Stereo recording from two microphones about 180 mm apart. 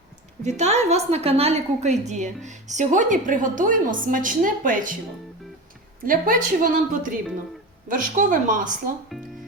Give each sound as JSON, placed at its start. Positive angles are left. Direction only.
{"t": 0.4, "sound": "a woman's voice", "side_deg": -40}
{"t": 6.0, "sound": "a woman's voice", "side_deg": -50}
{"t": 9.1, "sound": "music", "side_deg": 0}